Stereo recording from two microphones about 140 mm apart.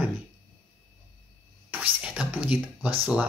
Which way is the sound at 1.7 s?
10° right (ahead or behind).